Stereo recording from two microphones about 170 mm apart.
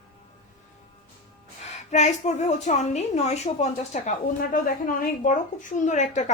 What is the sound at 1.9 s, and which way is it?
A woman's voice, 40° left (ahead or behind).